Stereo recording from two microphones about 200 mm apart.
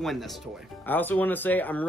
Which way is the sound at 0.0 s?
Centre (ahead or behind).